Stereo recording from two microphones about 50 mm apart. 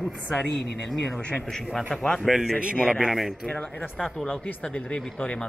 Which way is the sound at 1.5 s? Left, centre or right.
Centre.